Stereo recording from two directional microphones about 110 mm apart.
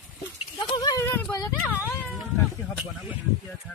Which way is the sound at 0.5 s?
35° left (ahead or behind).